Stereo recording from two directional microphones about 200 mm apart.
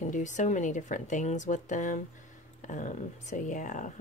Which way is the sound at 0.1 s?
35° left (ahead or behind).